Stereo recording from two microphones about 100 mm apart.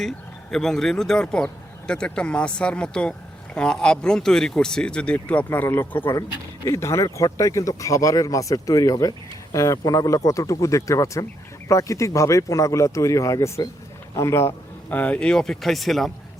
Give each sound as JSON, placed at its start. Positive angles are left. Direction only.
{"t": 0.5, "sound": "speech", "side_deg": 5}
{"t": 14.8, "sound": "speech", "side_deg": 15}